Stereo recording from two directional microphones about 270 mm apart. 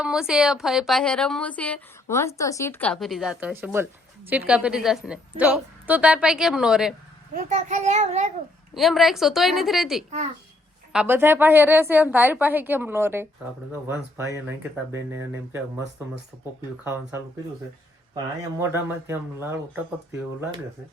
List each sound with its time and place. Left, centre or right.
0.0 s a woman's voice: centre
7.3 s a child's voice: right
8.7 s a woman's voice: centre
18.6 s a woman's voice: centre